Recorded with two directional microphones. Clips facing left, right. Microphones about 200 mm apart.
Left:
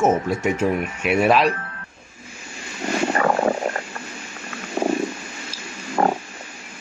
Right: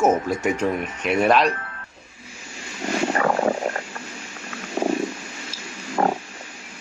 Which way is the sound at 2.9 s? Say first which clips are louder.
Left 1 dB; 55° left (ahead or behind).